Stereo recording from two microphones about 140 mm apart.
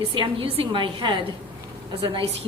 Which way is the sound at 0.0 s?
40° right (ahead or behind).